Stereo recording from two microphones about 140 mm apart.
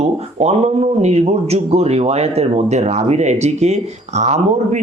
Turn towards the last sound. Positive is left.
turn(degrees=-55)  # may be behind; listen again after turning